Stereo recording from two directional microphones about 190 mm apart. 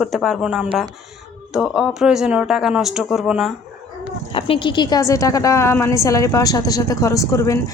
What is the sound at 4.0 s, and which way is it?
Speech, 30° left (ahead or behind).